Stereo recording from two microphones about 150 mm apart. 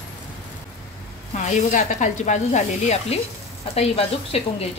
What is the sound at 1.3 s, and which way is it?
Speech, 55° left (ahead or behind).